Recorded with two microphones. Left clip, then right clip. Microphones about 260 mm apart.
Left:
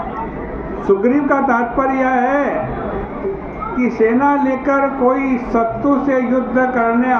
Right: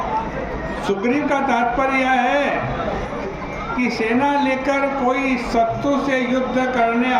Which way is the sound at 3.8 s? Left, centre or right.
Right.